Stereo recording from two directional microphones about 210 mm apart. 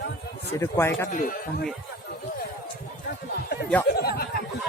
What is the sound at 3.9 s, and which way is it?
Speech, 45° left (ahead or behind).